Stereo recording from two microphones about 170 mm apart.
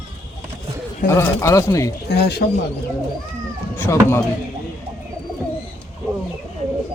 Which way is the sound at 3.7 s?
15° left (ahead or behind).